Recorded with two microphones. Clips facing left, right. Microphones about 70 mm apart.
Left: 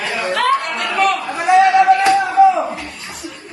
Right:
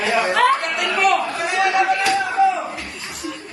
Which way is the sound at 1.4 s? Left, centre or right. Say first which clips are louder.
Left 7 dB; left.